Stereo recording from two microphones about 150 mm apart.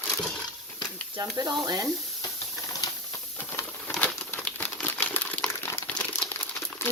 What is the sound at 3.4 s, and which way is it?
Patter, 15° left (ahead or behind).